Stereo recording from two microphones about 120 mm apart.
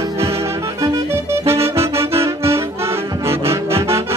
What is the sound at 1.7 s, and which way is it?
Accordion, 25° right (ahead or behind).